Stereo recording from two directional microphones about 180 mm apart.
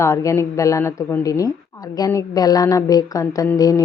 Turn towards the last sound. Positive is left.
turn(degrees=20)  # may be behind; listen again after turning